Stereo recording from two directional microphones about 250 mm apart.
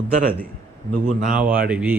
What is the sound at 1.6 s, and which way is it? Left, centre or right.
Speech, centre.